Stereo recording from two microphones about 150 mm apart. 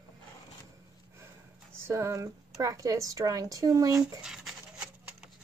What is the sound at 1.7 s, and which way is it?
Speech, 15° right (ahead or behind).